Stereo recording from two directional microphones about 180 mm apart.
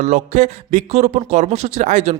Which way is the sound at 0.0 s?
40° right (ahead or behind).